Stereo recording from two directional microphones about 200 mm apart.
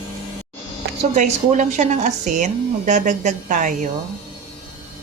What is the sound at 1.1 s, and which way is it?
A woman's voice, 40° right (ahead or behind).